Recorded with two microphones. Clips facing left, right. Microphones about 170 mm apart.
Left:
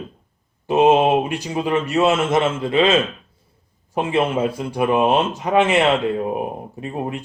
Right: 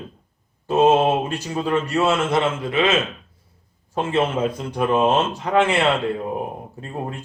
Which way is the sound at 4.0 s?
15° left (ahead or behind).